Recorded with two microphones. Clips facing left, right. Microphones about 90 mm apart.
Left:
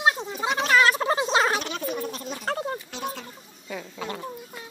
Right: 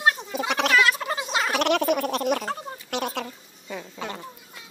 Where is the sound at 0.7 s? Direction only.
35° left (ahead or behind).